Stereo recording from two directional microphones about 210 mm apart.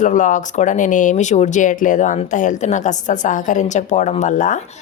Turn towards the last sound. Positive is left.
turn(degrees=35)  # may be behind; listen again after turning